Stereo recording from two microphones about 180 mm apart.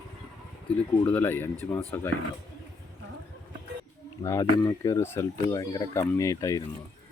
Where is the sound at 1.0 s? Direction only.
10° left (ahead or behind).